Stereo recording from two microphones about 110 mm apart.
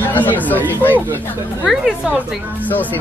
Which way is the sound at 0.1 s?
15° left (ahead or behind).